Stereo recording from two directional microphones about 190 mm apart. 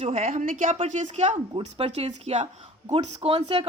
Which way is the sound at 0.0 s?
35° right (ahead or behind).